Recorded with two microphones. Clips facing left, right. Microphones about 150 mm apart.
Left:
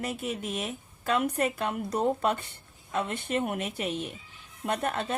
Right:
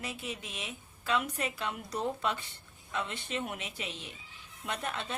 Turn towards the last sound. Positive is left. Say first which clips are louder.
# left 7 dB
turn(degrees=50)  # may be behind; listen again after turning